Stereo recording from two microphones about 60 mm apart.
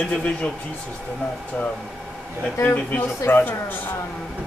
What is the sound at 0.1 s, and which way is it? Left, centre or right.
Speech, left.